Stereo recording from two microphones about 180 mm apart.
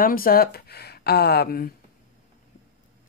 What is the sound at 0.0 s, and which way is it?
Speech, 55° left (ahead or behind).